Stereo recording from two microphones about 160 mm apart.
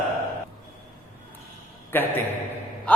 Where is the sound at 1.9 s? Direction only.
10° left (ahead or behind).